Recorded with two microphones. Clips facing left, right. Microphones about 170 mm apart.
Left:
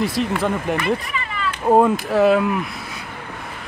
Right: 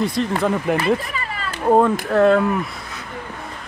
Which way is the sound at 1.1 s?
40° right (ahead or behind).